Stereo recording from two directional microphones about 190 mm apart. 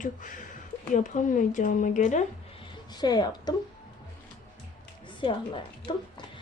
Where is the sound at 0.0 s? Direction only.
40° left (ahead or behind).